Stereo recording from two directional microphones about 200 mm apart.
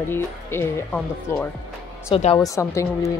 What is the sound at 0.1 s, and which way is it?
Speech, 10° left (ahead or behind).